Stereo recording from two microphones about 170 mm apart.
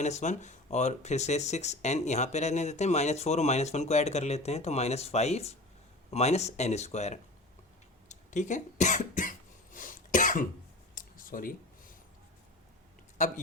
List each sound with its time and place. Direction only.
0.0 s speech: 45° left (ahead or behind)
8.1 s cough: 45° left (ahead or behind)
10.9 s a sound: 55° left (ahead or behind)
13.1 s speech: 45° left (ahead or behind)